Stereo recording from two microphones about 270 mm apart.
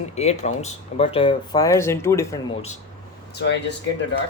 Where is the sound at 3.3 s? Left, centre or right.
Left.